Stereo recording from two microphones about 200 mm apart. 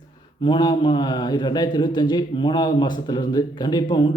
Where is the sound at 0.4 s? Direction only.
20° left (ahead or behind).